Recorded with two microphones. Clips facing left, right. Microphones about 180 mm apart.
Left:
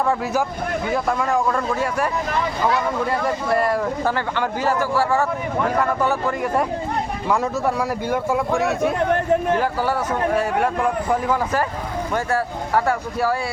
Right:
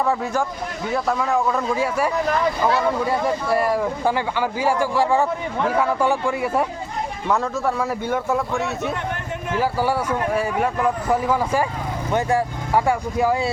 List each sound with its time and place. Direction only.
0.9 s speech: centre (ahead or behind)
3.5 s speech: 10° right (ahead or behind)
7.8 s speech: 5° left (ahead or behind)
9.0 s speech: 35° left (ahead or behind)
9.6 s speech: 10° right (ahead or behind)